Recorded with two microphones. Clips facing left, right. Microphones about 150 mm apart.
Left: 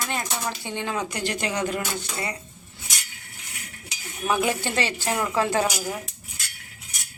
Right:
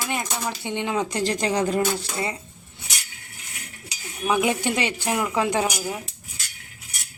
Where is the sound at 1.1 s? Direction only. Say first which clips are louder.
Right 4 dB; 35° right (ahead or behind).